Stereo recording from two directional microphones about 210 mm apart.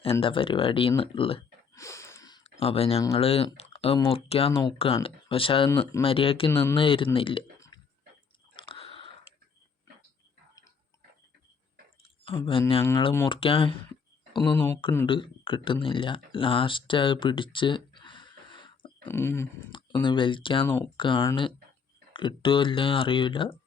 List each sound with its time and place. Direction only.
0.0 s speech: 25° left (ahead or behind)
1.7 s a sound: 15° left (ahead or behind)
2.4 s speech: 30° left (ahead or behind)
6.5 s speech: 10° left (ahead or behind)
6.7 s speech: 25° left (ahead or behind)
8.5 s a sound: 25° left (ahead or behind)
12.2 s speech: 25° left (ahead or behind)
14.5 s speech: 10° left (ahead or behind)
15.0 s speech: 25° left (ahead or behind)
19.0 s speech: 10° left (ahead or behind)
19.7 s speech: 20° left (ahead or behind)